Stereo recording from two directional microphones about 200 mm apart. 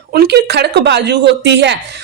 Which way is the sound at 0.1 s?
55° right (ahead or behind).